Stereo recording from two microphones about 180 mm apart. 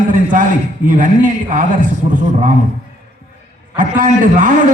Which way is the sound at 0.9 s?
45° right (ahead or behind).